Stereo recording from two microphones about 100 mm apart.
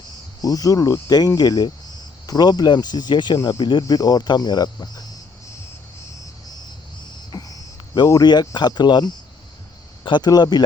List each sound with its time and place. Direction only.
0.4 s speech: 35° left (ahead or behind)
7.3 s cricket: 40° left (ahead or behind)
7.9 s speech: 40° left (ahead or behind)